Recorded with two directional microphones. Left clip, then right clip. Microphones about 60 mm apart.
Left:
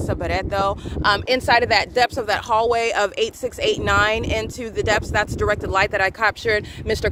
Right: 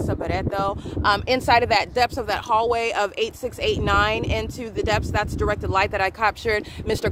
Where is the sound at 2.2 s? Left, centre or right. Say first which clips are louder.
Left 2 dB; left.